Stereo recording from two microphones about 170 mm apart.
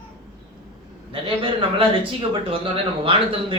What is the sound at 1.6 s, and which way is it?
Speech, 30° right (ahead or behind).